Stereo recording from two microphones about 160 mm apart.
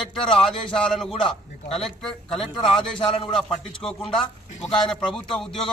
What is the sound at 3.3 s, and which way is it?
A man's voice, centre (ahead or behind).